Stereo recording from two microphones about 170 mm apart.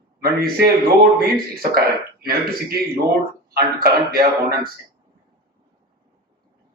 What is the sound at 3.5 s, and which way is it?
A man's voice, 65° right (ahead or behind).